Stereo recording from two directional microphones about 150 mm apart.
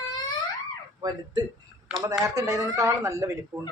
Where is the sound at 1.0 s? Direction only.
30° right (ahead or behind).